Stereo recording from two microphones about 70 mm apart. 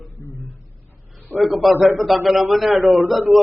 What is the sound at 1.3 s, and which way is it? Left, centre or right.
A man's voice, centre.